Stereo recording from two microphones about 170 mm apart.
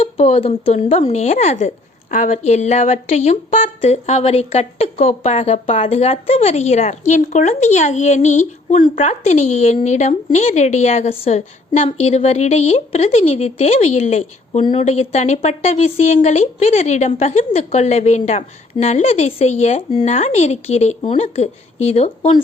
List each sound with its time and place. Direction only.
0.0 s speech: 35° left (ahead or behind)